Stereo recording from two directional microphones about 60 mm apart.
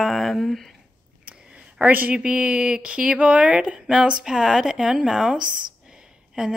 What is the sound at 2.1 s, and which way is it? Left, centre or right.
A woman's voice, centre.